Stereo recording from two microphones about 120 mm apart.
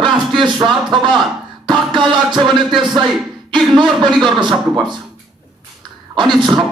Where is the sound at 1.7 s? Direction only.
40° right (ahead or behind).